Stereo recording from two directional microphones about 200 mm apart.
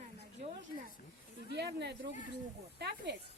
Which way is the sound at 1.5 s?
60° right (ahead or behind).